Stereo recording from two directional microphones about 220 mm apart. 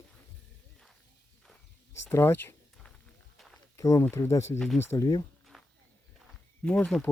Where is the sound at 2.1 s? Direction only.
10° left (ahead or behind).